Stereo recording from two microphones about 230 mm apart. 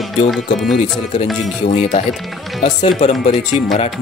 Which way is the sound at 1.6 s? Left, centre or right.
Left.